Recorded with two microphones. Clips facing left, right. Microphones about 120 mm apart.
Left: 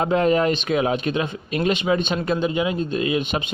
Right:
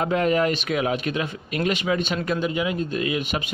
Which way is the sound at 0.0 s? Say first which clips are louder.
Left 2 dB; 25° left (ahead or behind).